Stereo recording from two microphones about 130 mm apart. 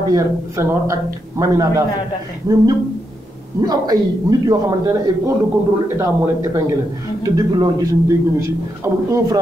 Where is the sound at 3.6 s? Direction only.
30° right (ahead or behind).